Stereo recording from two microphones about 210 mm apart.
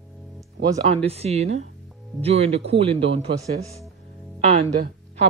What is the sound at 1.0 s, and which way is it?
Speech, 30° right (ahead or behind).